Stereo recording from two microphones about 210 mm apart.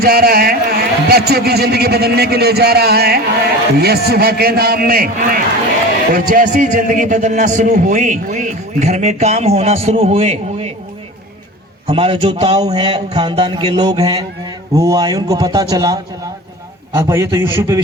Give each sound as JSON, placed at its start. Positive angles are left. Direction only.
{"t": 0.0, "sound": "a man's voice", "side_deg": -45}
{"t": 11.9, "sound": "a man's voice", "side_deg": -25}